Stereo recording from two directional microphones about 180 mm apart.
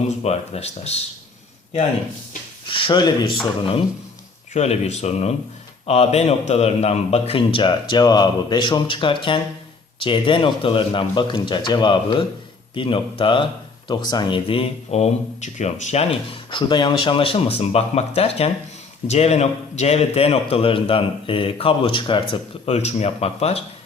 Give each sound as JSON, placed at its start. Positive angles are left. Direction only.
{"t": 0.0, "sound": "speech", "side_deg": 35}
{"t": 2.6, "sound": "speech", "side_deg": 30}
{"t": 4.5, "sound": "speech", "side_deg": 40}